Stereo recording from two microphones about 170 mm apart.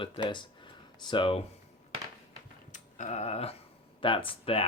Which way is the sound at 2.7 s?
40° left (ahead or behind).